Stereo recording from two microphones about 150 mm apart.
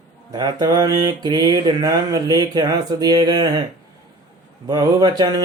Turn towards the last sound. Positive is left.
turn(degrees=-25)  # may be behind; listen again after turning